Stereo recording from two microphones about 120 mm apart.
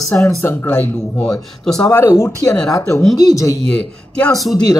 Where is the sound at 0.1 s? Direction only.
20° left (ahead or behind).